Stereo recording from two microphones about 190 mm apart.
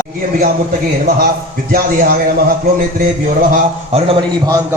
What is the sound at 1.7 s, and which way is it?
Speech, 50° right (ahead or behind).